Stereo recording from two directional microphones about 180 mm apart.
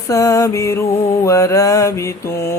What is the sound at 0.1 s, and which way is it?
Mantra, 15° left (ahead or behind).